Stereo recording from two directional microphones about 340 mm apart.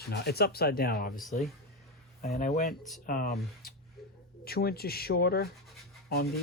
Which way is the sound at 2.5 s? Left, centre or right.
Centre.